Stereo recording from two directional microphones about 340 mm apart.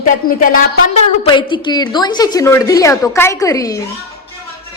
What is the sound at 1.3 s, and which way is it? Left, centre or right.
A woman's voice, centre.